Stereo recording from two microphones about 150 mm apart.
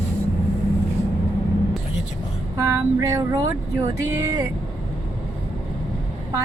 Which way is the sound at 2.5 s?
20° right (ahead or behind).